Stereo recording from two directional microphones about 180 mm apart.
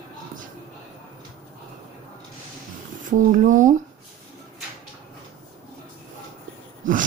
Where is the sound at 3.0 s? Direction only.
45° right (ahead or behind).